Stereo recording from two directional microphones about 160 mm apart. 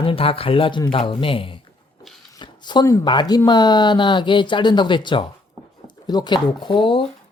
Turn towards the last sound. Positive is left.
turn(degrees=30)  # may be behind; listen again after turning